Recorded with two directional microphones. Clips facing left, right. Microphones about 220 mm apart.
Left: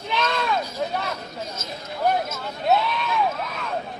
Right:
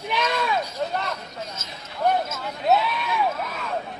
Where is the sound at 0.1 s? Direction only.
10° right (ahead or behind).